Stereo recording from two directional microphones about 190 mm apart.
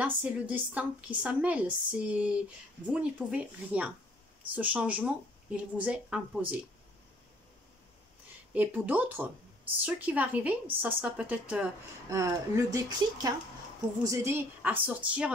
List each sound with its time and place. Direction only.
0.0 s a woman's voice: 10° right (ahead or behind)
8.5 s a woman's voice: 10° right (ahead or behind)